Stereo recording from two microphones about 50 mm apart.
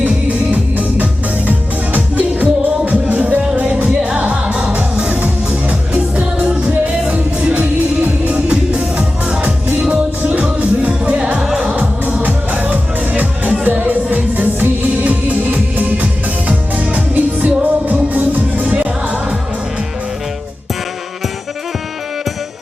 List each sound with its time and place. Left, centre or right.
0.5 s music: right
2.1 s music: right
3.2 s music: right
9.9 s music: right
11.6 s music: right